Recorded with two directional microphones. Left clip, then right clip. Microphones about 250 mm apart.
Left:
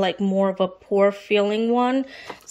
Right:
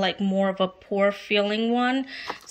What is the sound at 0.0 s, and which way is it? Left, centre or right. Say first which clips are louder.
Speech: left 3 dB; centre.